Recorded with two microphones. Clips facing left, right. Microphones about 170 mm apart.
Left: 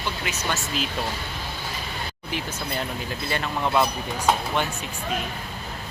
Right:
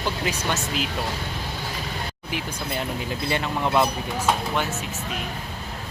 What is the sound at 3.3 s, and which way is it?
Speech, 15° right (ahead or behind).